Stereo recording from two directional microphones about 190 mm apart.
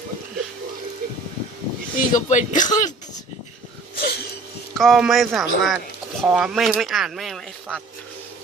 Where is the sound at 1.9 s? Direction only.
40° left (ahead or behind).